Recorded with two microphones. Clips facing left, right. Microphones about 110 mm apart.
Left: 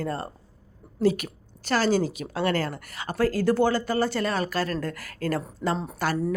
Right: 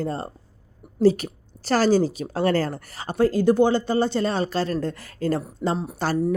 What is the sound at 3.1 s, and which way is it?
A woman's voice, 20° right (ahead or behind).